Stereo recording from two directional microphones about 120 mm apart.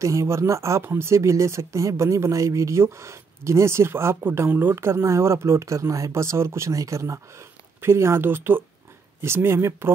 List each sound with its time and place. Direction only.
0.0 s speech: 25° right (ahead or behind)